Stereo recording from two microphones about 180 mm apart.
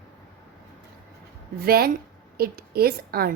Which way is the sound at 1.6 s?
60° right (ahead or behind).